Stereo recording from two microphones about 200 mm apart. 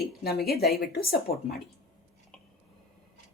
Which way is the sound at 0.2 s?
50° left (ahead or behind).